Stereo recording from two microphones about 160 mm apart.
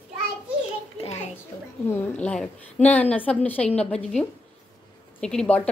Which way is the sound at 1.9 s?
10° left (ahead or behind).